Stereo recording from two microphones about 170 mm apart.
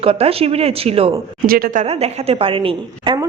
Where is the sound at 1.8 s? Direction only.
35° right (ahead or behind).